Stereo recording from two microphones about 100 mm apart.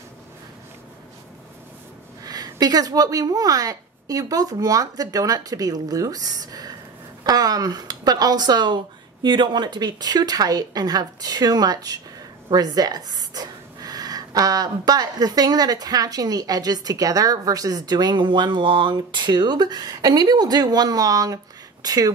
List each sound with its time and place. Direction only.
2.2 s a woman's voice: 40° right (ahead or behind)